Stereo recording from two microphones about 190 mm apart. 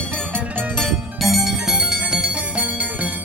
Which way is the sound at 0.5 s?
5° right (ahead or behind).